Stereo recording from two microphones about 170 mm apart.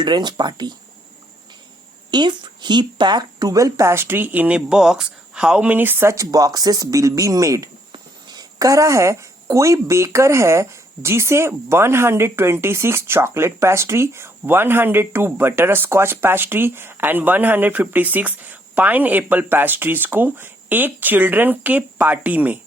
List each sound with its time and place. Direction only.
0.0 s speech: 25° right (ahead or behind)
2.0 s a woman's voice: 25° right (ahead or behind); by 22.5 s 10° right (ahead or behind)